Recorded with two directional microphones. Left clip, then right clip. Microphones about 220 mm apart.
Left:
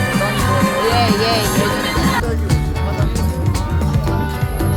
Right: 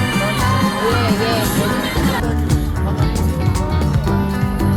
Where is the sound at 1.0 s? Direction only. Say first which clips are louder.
Left 3 dB; 55° left (ahead or behind).